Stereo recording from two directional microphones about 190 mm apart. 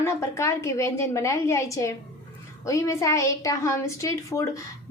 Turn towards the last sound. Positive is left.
turn(degrees=15)  # may be behind; listen again after turning